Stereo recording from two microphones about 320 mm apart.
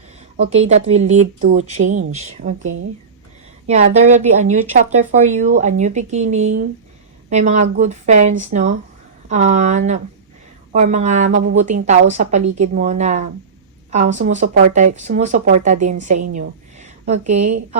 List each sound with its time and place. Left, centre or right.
0.3 s speech: centre
3.7 s speech: right